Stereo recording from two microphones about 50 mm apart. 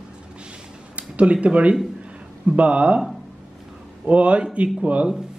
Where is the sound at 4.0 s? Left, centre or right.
Right.